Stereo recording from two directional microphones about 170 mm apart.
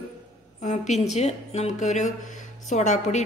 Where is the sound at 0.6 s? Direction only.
45° left (ahead or behind).